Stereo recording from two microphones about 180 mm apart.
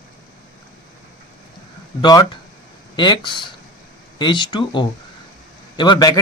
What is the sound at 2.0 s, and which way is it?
Speech, 20° left (ahead or behind).